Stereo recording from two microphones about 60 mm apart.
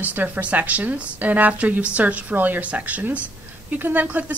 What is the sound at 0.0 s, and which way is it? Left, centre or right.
A woman's voice, right.